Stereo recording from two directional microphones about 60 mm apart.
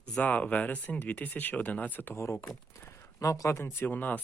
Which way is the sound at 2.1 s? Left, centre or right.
Left.